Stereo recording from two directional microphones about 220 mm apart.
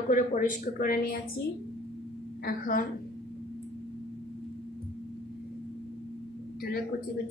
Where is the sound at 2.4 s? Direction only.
40° left (ahead or behind).